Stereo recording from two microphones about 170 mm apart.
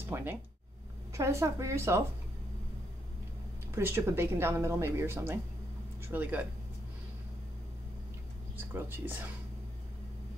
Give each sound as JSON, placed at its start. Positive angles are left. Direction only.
{"t": 0.0, "sound": "speech", "side_deg": -15}
{"t": 3.7, "sound": "speech", "side_deg": -15}
{"t": 8.5, "sound": "speech", "side_deg": -10}